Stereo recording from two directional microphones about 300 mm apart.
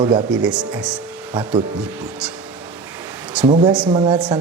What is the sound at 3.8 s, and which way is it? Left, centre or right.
Speech, centre.